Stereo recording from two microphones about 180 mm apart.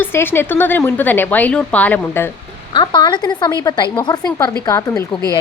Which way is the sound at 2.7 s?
25° left (ahead or behind).